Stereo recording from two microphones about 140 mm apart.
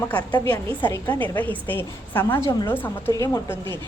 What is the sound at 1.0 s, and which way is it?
A woman's voice, 15° left (ahead or behind).